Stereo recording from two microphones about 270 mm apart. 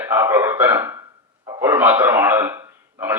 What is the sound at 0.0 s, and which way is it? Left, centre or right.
A man's voice, centre.